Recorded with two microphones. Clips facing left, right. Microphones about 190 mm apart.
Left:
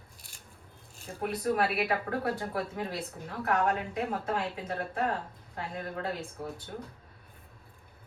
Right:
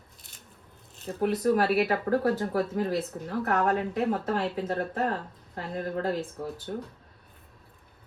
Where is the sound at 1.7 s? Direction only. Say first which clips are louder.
Right 6 dB; 40° right (ahead or behind).